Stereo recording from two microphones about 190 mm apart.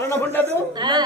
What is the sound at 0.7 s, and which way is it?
Speech, 25° right (ahead or behind).